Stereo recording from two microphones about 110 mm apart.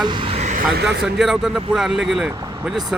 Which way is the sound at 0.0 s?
50° right (ahead or behind).